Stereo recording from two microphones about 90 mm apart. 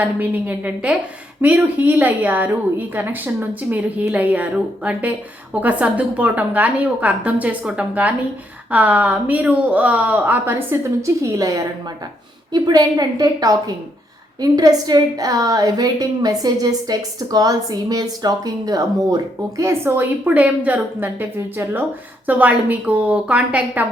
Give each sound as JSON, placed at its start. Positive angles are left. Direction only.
{"t": 0.0, "sound": "a woman's voice", "side_deg": -20}
{"t": 11.3, "sound": "a woman's voice", "side_deg": -40}
{"t": 19.8, "sound": "a woman's voice", "side_deg": -20}